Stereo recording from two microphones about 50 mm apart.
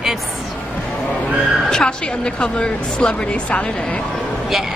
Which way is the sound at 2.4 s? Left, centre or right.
Centre.